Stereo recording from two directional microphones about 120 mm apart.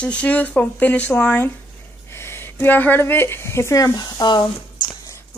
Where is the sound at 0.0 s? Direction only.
10° left (ahead or behind); by 4.5 s 35° left (ahead or behind).